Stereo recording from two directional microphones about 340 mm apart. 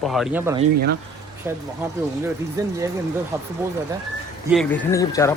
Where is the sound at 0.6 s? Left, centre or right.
Right.